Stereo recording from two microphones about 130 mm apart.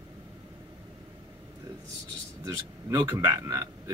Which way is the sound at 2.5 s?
20° right (ahead or behind).